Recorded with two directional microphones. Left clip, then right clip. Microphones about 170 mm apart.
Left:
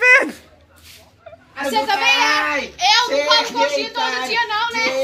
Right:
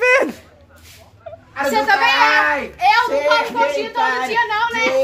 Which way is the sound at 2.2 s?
5° left (ahead or behind).